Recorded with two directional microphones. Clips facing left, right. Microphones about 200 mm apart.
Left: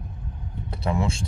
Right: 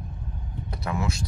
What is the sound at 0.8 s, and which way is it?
Speech, 30° left (ahead or behind).